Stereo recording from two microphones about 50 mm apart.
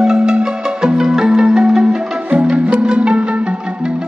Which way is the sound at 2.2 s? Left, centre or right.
Right.